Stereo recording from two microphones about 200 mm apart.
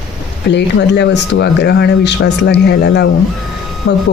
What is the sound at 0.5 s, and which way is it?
Speech, 60° left (ahead or behind).